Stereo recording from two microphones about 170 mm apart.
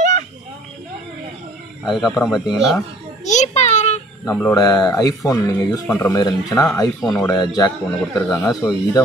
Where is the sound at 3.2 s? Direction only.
45° left (ahead or behind).